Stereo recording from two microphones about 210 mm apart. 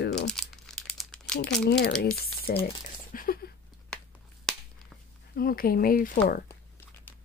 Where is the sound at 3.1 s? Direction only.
45° left (ahead or behind).